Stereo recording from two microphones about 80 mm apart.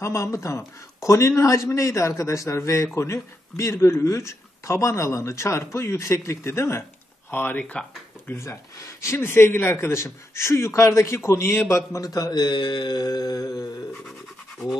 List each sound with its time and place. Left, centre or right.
0.0 s speech: left
7.2 s speech: left
8.4 s speech: left
12.0 s speech: left
13.0 s speech: left